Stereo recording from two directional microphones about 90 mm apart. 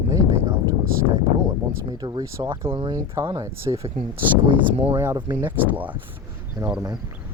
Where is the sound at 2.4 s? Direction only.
25° right (ahead or behind).